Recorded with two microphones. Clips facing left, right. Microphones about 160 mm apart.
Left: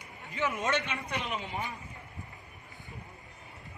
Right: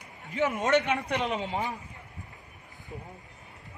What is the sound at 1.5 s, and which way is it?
Speech, 90° right.